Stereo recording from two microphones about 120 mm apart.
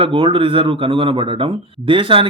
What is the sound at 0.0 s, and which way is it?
Speech, 45° right (ahead or behind).